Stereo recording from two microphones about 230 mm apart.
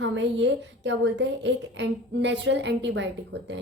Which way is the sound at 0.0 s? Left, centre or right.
Right.